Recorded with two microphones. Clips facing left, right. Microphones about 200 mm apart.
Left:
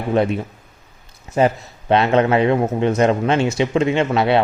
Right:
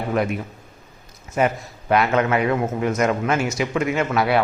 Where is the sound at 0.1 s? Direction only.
30° left (ahead or behind).